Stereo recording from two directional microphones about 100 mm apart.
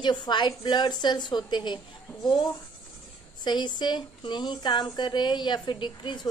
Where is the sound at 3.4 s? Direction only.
45° left (ahead or behind).